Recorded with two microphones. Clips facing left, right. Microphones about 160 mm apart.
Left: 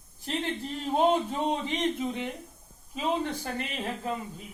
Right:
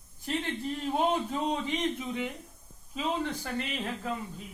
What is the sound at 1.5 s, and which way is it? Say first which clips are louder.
Speech: left 2 dB; 30° left (ahead or behind).